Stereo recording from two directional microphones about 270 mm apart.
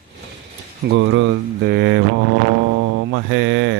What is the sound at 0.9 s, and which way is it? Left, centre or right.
Speech, right.